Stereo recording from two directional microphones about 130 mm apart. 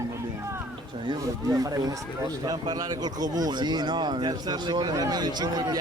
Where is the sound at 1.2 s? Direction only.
25° right (ahead or behind).